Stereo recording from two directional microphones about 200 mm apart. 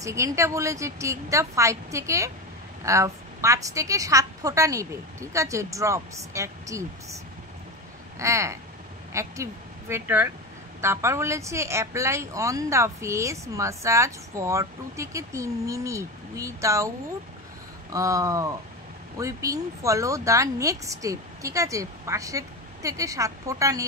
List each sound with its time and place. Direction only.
0.0 s a woman's voice: 15° right (ahead or behind)
8.2 s a woman's voice: 15° right (ahead or behind)
17.9 s a woman's voice: 15° right (ahead or behind)